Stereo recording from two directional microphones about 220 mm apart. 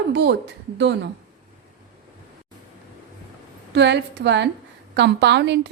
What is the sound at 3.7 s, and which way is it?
A woman's voice, 50° right (ahead or behind).